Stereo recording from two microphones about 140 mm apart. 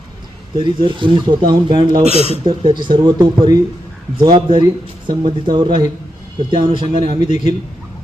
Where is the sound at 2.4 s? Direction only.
35° right (ahead or behind).